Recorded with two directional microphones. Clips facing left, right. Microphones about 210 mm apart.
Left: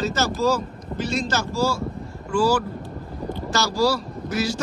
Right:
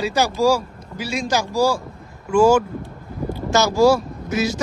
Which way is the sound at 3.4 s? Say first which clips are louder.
Right 7 dB; 20° right (ahead or behind).